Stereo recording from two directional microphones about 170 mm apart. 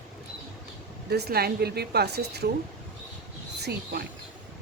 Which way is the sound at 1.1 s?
70° right (ahead or behind).